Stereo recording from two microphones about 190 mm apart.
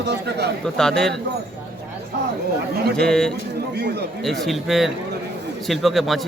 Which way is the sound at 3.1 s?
5° left (ahead or behind).